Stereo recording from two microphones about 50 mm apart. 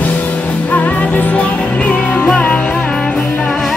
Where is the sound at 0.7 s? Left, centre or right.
Left.